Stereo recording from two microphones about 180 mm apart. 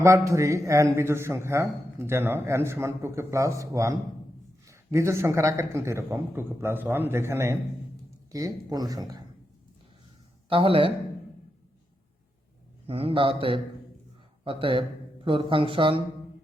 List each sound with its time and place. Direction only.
0.0 s a man's voice: 15° right (ahead or behind)
10.5 s speech: 30° right (ahead or behind)
12.9 s speech: 30° right (ahead or behind)